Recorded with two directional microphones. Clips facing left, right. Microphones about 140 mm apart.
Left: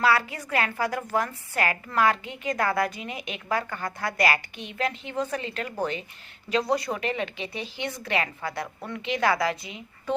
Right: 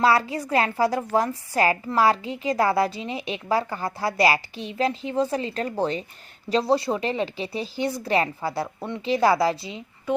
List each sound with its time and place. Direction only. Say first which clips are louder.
0.0 s a woman's voice: right 3 dB; 35° right (ahead or behind)
10.1 s speech: right 3 dB; 10° right (ahead or behind)